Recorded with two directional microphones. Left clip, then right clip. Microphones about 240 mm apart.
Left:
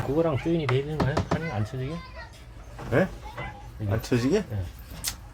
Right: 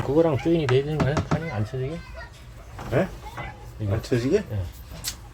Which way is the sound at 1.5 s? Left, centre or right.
Centre.